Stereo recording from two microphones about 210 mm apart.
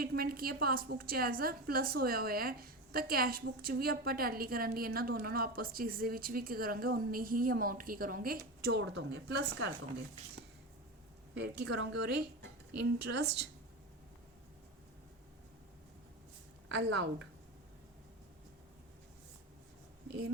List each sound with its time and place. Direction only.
0.0 s a woman's voice: 45° right (ahead or behind)
11.7 s a woman's voice: 55° right (ahead or behind)
16.6 s a woman's voice: 55° right (ahead or behind)
20.1 s speech: 50° right (ahead or behind)